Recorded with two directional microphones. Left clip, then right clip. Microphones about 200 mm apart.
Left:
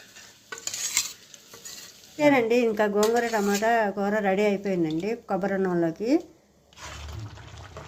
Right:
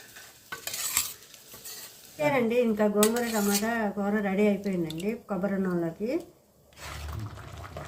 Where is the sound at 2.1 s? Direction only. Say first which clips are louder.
Left 4 dB; 55° left (ahead or behind).